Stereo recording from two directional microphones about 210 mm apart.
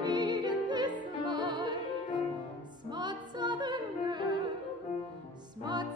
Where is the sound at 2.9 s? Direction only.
20° right (ahead or behind).